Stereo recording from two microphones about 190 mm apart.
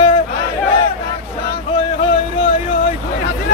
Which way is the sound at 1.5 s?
25° left (ahead or behind).